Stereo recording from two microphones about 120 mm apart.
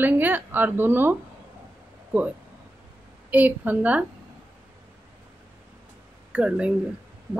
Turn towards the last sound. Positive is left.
turn(degrees=-10)  # may be behind; listen again after turning